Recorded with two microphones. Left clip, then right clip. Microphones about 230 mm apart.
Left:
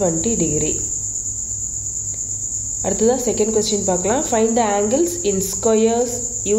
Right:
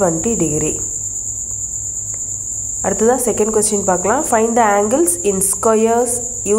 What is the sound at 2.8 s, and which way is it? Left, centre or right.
Cricket, centre.